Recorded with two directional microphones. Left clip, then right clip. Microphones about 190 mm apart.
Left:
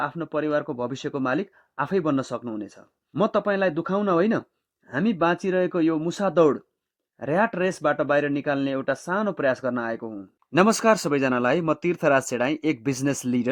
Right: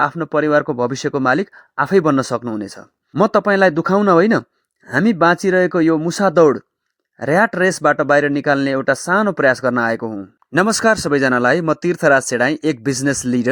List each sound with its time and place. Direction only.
0.0 s a man's voice: 35° right (ahead or behind)
10.5 s speech: 20° right (ahead or behind)